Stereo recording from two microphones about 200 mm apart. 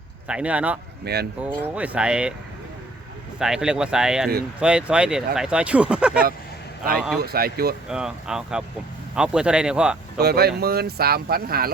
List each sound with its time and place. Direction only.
0.3 s speech: 5° right (ahead or behind)
1.0 s speech: 50° right (ahead or behind)
1.6 s speech: 5° right (ahead or behind)
3.3 s speech: 5° right (ahead or behind)
7.2 s speech: 50° right (ahead or behind)
7.9 s speech: 5° right (ahead or behind)
10.2 s speech: 50° right (ahead or behind)